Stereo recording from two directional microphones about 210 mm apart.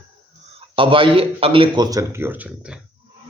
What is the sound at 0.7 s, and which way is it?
Speech, 25° right (ahead or behind).